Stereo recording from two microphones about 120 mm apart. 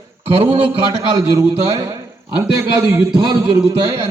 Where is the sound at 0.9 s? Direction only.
30° right (ahead or behind).